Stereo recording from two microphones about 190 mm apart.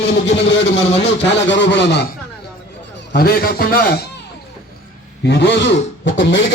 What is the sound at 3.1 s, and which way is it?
A man's voice, 55° left (ahead or behind).